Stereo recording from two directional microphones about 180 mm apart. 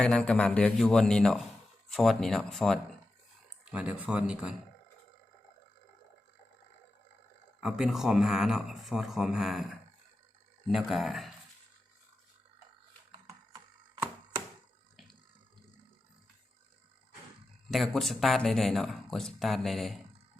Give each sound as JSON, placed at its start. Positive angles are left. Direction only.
{"t": 0.0, "sound": "speech", "side_deg": 5}
{"t": 7.6, "sound": "speech", "side_deg": 0}
{"t": 13.2, "sound": "a sound", "side_deg": -20}
{"t": 17.7, "sound": "speech", "side_deg": 0}